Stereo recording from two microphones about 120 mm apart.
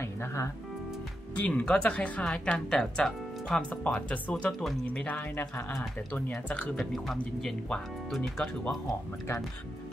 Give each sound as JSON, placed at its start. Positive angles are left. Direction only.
{"t": 0.0, "sound": "music", "side_deg": 20}
{"t": 1.4, "sound": "speech", "side_deg": 10}